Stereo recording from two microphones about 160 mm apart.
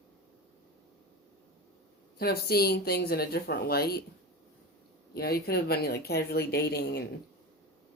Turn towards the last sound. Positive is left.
turn(degrees=85)